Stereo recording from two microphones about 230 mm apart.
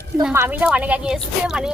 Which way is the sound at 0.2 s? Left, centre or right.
Centre.